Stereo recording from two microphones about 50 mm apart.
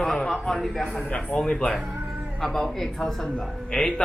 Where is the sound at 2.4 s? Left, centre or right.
Centre.